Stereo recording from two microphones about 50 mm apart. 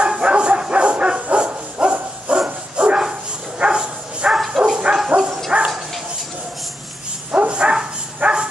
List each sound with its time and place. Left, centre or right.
0.0 s bow-wow: right
3.5 s dog: centre
4.9 s bow-wow: centre
5.5 s dog: right
7.2 s bow-wow: right